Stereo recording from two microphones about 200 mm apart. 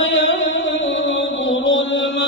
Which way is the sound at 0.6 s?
65° left (ahead or behind).